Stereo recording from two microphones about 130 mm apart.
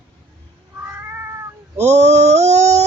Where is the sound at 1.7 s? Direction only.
60° right (ahead or behind).